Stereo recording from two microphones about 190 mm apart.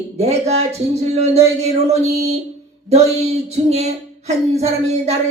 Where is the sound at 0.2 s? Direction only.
35° right (ahead or behind).